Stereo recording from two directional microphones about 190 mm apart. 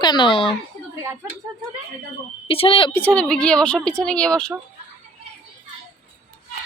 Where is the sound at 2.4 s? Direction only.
30° left (ahead or behind).